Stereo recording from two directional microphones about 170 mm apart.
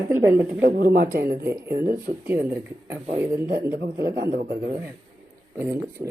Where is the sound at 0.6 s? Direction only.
65° right (ahead or behind).